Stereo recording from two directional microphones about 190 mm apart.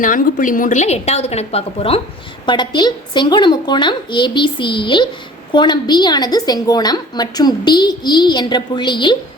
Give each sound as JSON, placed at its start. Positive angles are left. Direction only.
{"t": 0.0, "sound": "a woman's voice", "side_deg": 45}